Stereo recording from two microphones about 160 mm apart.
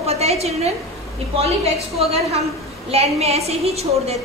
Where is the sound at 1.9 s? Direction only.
40° right (ahead or behind).